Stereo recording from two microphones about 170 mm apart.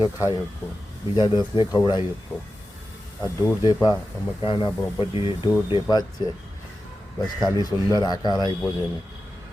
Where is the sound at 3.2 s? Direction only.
20° left (ahead or behind).